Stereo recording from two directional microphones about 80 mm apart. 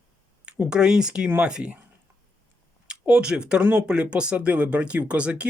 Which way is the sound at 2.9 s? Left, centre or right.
Centre.